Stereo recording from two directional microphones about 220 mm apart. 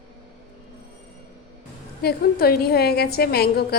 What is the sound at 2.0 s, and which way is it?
A woman's voice, 45° left (ahead or behind).